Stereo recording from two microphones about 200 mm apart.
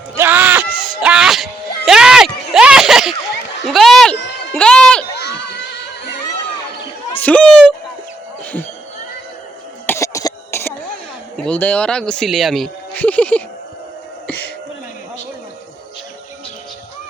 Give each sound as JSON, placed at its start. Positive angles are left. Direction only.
{"t": 0.2, "sound": "music", "side_deg": -10}
{"t": 3.7, "sound": "a sound", "side_deg": 0}
{"t": 5.1, "sound": "children shouting", "side_deg": 55}
{"t": 7.2, "sound": "a sound", "side_deg": 5}
{"t": 9.8, "sound": "throat clearing", "side_deg": 15}
{"t": 11.4, "sound": "speech", "side_deg": 5}
{"t": 14.3, "sound": "music", "side_deg": 10}